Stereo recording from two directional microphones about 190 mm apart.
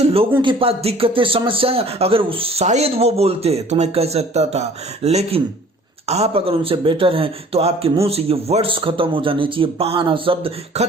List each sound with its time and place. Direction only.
0.3 s a man's voice: 30° right (ahead or behind)